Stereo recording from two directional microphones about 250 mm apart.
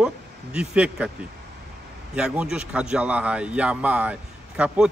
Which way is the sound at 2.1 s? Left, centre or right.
Centre.